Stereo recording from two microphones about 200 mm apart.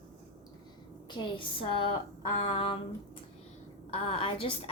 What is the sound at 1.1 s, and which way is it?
A woman's voice, 25° left (ahead or behind).